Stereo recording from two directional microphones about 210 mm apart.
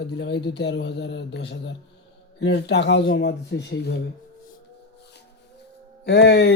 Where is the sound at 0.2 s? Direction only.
55° left (ahead or behind).